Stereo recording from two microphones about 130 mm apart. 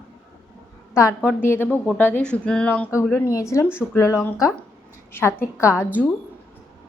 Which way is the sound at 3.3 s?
25° left (ahead or behind).